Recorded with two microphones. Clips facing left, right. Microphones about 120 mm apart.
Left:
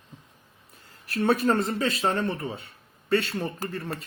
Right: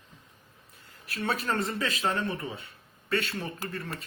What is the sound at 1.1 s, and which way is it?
Speech, 40° left (ahead or behind).